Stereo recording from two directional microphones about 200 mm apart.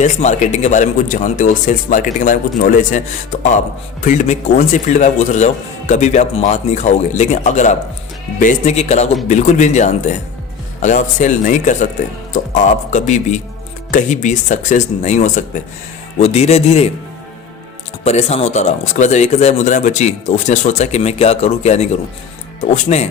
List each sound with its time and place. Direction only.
0.0 s speech: 35° left (ahead or behind)
4.0 s speech: 40° left (ahead or behind)
18.0 s speech: 30° left (ahead or behind)